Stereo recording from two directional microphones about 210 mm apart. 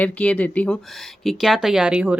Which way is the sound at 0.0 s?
5° left (ahead or behind).